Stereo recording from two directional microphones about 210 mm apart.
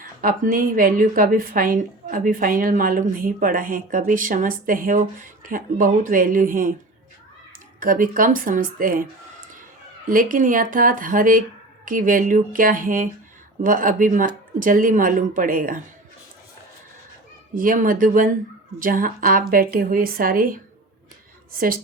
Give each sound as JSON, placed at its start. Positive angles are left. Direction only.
{"t": 0.2, "sound": "a woman's voice", "side_deg": -45}
{"t": 7.8, "sound": "a woman's voice", "side_deg": -40}
{"t": 10.1, "sound": "a woman's voice", "side_deg": -40}
{"t": 17.5, "sound": "a woman's voice", "side_deg": -40}